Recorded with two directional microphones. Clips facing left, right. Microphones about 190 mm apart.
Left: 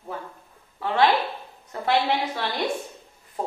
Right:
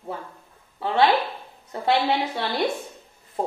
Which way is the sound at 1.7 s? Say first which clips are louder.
Right 1 dB; 25° right (ahead or behind).